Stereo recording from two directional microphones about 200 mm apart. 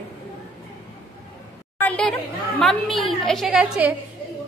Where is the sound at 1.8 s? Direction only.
5° left (ahead or behind).